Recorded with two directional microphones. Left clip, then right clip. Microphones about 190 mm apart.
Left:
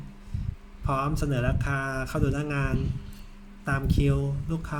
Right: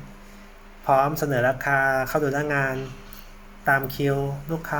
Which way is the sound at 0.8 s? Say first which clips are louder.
Right 9 dB; 35° left (ahead or behind).